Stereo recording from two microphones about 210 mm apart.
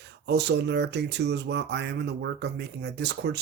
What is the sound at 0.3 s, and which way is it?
Speech, 55° right (ahead or behind).